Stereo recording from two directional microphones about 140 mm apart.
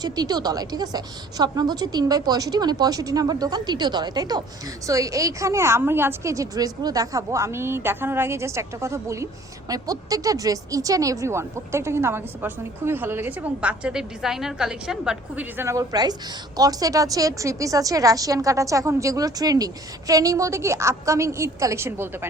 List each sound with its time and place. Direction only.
0.0 s a woman's voice: 30° right (ahead or behind); by 15.6 s 5° right (ahead or behind)
15.6 s a woman's voice: 25° right (ahead or behind)